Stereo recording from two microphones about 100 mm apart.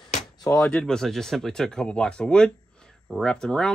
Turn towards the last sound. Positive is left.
turn(degrees=5)  # may be behind; listen again after turning